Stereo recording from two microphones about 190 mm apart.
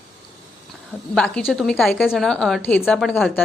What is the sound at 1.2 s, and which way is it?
A woman's voice, 5° left (ahead or behind).